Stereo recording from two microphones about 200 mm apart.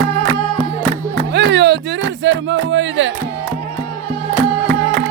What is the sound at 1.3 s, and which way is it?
Music, 60° right (ahead or behind).